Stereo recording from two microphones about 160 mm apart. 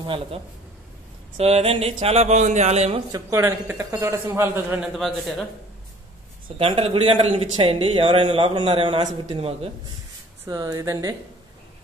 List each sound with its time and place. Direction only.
0.0 s speech: 30° right (ahead or behind)
3.1 s a man's voice: 20° right (ahead or behind)
4.9 s a man's voice: centre (ahead or behind)
6.6 s speech: 35° right (ahead or behind)
10.4 s speech: 20° right (ahead or behind)